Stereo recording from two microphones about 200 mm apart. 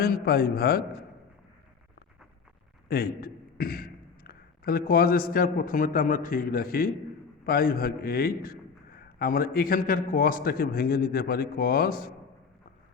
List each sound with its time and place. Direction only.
0.0 s a man's voice: 50° left (ahead or behind)
2.9 s a man's voice: 50° left (ahead or behind)